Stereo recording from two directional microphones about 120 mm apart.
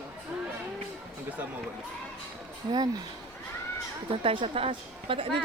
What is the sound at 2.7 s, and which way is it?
Speech, 30° right (ahead or behind).